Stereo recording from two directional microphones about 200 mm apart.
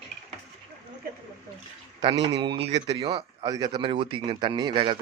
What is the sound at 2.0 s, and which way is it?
A man's voice, 20° right (ahead or behind).